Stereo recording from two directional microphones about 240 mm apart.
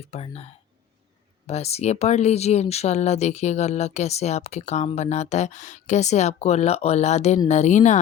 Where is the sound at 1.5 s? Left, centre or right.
Left.